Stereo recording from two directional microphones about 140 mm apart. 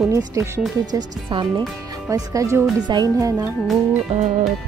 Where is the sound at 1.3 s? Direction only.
35° right (ahead or behind).